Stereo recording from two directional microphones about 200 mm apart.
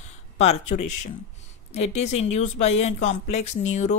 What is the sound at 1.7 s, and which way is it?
Speech, 35° left (ahead or behind).